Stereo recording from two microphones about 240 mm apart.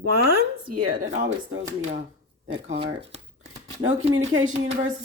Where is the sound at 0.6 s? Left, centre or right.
Right.